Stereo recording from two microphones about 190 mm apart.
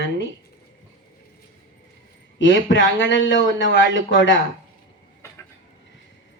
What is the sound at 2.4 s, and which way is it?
Speech, 80° left.